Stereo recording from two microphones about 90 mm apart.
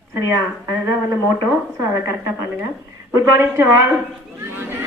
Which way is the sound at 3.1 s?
30° right (ahead or behind).